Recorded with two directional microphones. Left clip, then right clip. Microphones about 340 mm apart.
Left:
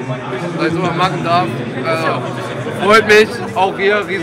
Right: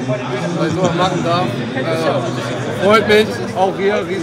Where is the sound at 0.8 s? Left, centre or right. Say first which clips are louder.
Right 2 dB; centre.